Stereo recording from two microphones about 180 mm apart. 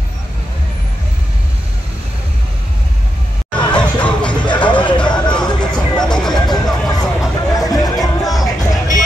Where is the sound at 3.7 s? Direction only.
5° left (ahead or behind).